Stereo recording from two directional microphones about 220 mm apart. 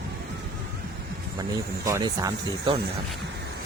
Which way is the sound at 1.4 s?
15° right (ahead or behind).